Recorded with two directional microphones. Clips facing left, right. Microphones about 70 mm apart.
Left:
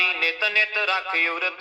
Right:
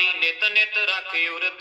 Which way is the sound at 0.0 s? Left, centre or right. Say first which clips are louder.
Left 1 dB; left.